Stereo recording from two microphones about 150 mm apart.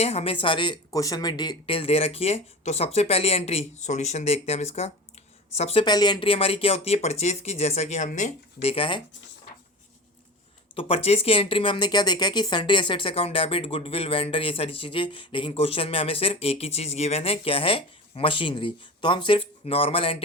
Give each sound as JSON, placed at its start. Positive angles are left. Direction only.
{"t": 0.0, "sound": "speech", "side_deg": 45}
{"t": 5.8, "sound": "speech", "side_deg": 30}
{"t": 8.7, "sound": "speech", "side_deg": 35}
{"t": 10.8, "sound": "speech", "side_deg": 40}